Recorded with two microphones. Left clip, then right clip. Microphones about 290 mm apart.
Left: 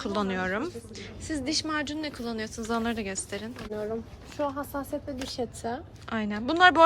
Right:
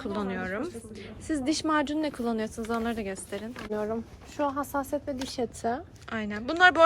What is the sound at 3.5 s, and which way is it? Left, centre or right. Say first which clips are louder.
Speech: right 3 dB; right.